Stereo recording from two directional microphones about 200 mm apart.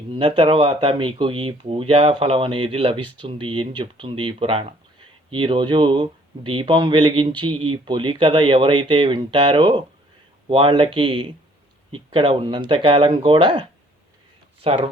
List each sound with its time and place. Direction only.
0.1 s speech: 30° right (ahead or behind)